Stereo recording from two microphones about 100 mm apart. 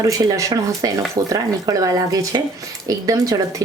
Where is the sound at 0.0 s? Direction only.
35° right (ahead or behind).